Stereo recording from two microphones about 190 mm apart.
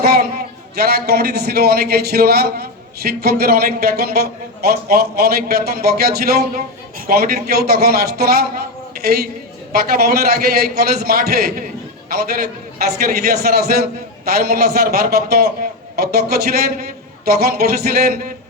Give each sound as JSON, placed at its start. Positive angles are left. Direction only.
{"t": 0.0, "sound": "a man's voice", "side_deg": -55}